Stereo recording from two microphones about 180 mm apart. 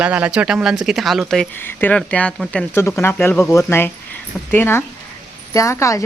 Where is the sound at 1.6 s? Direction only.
10° left (ahead or behind).